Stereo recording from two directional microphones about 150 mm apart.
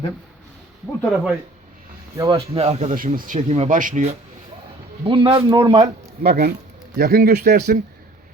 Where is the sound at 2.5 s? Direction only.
45° right (ahead or behind).